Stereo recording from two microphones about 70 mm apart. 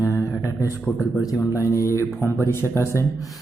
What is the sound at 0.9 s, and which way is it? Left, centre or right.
Speech, left.